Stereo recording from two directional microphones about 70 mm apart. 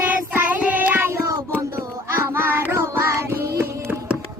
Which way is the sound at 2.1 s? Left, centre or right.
Right.